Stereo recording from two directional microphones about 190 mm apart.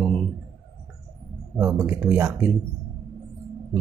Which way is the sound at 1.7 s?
5° right (ahead or behind).